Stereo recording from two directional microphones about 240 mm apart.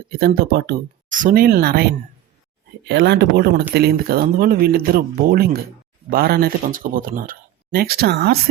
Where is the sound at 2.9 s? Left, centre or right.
Right.